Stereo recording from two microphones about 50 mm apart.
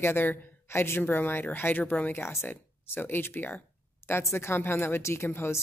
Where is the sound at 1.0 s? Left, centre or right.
Left.